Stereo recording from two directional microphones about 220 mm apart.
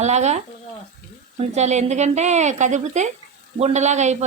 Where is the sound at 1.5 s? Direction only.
30° right (ahead or behind).